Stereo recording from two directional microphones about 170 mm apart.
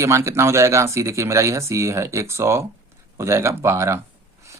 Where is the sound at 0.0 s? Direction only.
15° right (ahead or behind).